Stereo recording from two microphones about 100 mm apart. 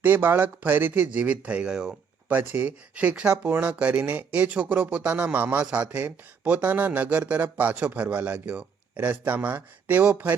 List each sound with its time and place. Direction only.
0.0 s speech: 20° right (ahead or behind)
2.3 s speech: 20° right (ahead or behind)